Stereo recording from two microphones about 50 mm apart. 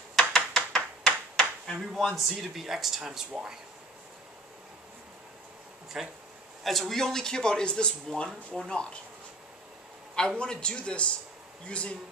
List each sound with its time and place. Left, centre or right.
0.5 s a sound: centre
1.8 s speech: centre
5.9 s speech: centre
6.6 s a man's voice: centre
10.1 s a man's voice: centre